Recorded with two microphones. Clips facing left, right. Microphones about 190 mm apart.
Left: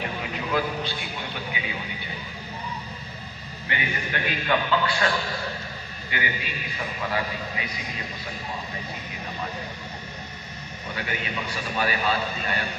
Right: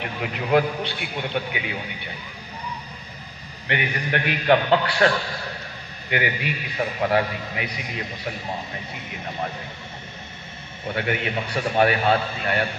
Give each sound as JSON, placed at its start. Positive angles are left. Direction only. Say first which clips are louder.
{"t": 0.5, "sound": "a man's voice", "louder": "right 7 dB", "side_deg": -65}
{"t": 3.6, "sound": "a man's voice", "louder": "right 4 dB", "side_deg": -65}
{"t": 11.0, "sound": "a man's voice", "louder": "right 6 dB", "side_deg": -65}